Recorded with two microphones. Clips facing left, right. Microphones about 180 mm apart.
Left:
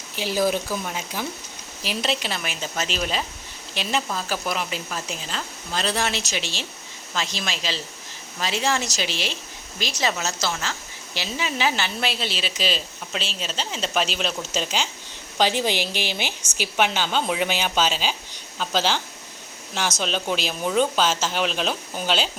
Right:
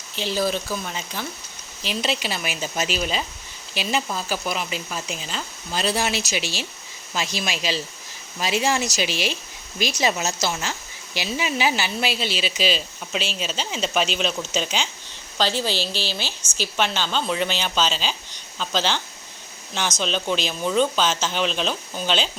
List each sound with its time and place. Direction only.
0.2 s a woman's voice: 10° left (ahead or behind)
15.4 s speech: 15° left (ahead or behind)